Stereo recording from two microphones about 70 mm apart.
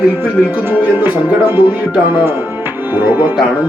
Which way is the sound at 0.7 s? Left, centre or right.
Right.